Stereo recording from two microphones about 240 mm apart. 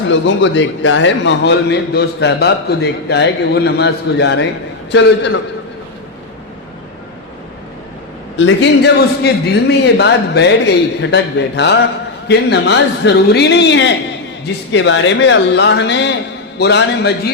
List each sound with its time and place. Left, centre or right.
0.1 s a man's voice: left
8.4 s a man's voice: left